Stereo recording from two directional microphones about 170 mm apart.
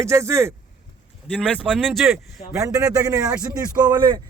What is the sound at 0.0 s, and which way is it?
Speech, 15° right (ahead or behind).